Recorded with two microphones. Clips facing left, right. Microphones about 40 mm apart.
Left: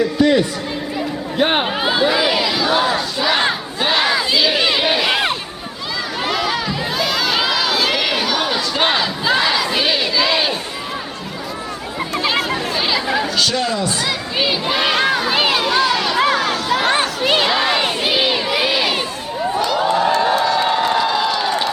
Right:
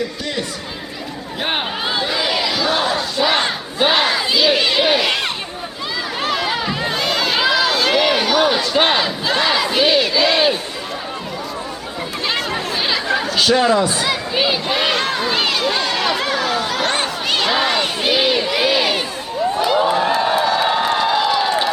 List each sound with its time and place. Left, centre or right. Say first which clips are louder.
0.2 s chatter: left 11 dB; centre
1.4 s battle cry: left 5 dB; centre
3.8 s battle cry: right 3 dB; centre
4.0 s crowd: even; centre
6.3 s crowd: left 1 dB; centre
6.9 s run: left 1 dB; centre
9.5 s battle cry: right 2 dB; centre
12.2 s chatter: left 2 dB; centre
13.3 s a sound: right 4 dB; centre
17.7 s crowd: even; centre
19.5 s crowd: even; centre